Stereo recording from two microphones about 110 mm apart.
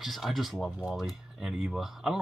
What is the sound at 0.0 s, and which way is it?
Speech, centre (ahead or behind).